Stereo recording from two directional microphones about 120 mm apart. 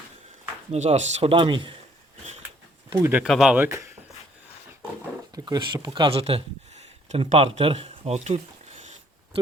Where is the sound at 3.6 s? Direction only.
20° right (ahead or behind).